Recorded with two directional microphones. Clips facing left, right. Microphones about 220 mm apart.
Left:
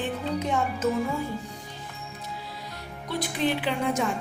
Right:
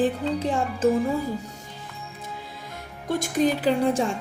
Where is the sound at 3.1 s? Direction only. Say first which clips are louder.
Right 5 dB; 45° right (ahead or behind).